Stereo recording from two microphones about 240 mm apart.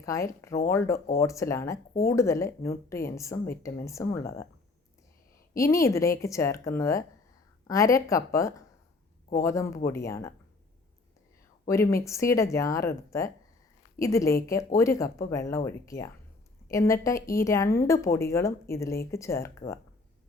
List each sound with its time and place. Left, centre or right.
0.0 s a woman's voice: centre
5.5 s a woman's voice: centre
11.7 s a woman's voice: centre